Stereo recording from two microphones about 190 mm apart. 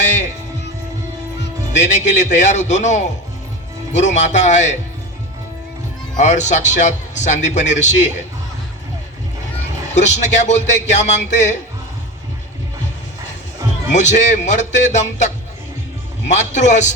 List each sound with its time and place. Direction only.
1.7 s a man's voice: 40° left (ahead or behind)
6.1 s a man's voice: 40° left (ahead or behind)
9.9 s a man's voice: 40° left (ahead or behind)
13.9 s a man's voice: 40° left (ahead or behind)